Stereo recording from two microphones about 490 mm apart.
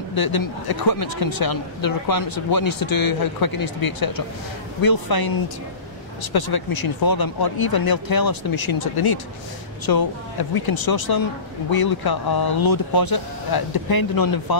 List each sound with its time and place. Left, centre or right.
0.1 s speech: left